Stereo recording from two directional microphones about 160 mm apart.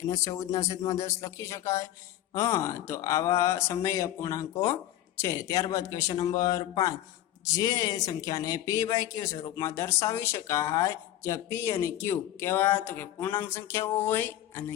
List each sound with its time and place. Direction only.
0.0 s speech: 20° left (ahead or behind)